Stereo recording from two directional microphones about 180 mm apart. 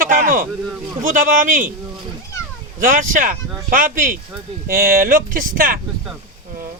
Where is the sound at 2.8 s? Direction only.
50° right (ahead or behind).